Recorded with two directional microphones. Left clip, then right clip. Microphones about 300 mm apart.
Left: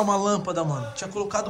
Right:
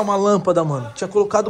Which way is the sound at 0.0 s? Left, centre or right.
Centre.